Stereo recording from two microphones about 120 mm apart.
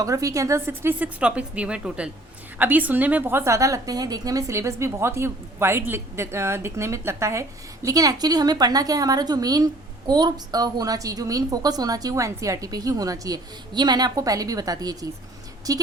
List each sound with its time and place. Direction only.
0.0 s a woman's voice: 30° right (ahead or behind)